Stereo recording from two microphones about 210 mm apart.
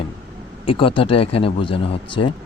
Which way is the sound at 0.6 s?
25° left (ahead or behind).